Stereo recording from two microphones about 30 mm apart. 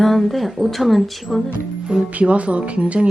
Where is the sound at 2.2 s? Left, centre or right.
Right.